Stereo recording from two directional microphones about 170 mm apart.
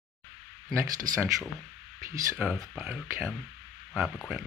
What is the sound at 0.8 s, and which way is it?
Speech, 20° right (ahead or behind).